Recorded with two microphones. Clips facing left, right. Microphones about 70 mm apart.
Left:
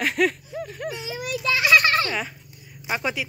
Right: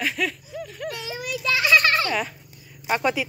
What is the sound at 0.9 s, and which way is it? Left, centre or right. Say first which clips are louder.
Speech: even; centre.